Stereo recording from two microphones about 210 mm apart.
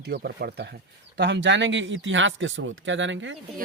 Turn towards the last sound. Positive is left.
turn(degrees=-60)  # may be behind; listen again after turning